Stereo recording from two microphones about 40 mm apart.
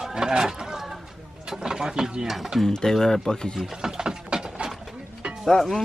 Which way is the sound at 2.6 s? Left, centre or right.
Centre.